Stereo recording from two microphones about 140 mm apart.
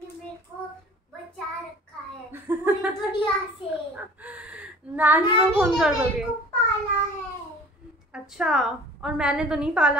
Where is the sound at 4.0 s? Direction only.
10° right (ahead or behind).